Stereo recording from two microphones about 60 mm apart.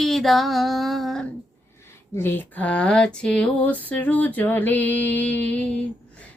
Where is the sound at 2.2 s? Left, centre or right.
Left.